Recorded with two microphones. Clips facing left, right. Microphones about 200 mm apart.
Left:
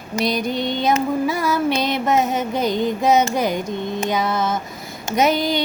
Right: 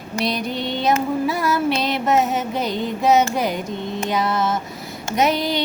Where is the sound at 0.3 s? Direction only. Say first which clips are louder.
Left 3 dB; 45° left (ahead or behind).